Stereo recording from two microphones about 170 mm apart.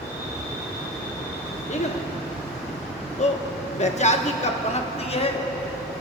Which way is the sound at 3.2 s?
40° left (ahead or behind).